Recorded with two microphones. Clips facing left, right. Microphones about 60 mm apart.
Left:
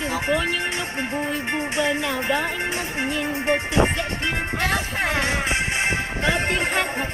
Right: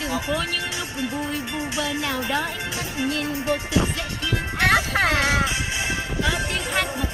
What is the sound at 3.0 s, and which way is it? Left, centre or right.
Music, left.